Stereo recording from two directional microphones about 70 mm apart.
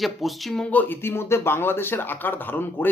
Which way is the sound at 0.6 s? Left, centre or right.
Left.